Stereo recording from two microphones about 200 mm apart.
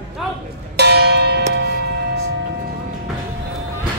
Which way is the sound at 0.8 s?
55° right (ahead or behind).